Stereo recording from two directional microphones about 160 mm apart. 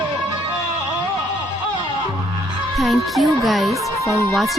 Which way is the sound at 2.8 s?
Centre (ahead or behind).